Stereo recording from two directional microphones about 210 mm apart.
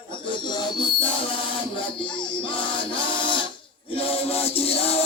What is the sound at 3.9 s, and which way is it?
Music, 25° left (ahead or behind).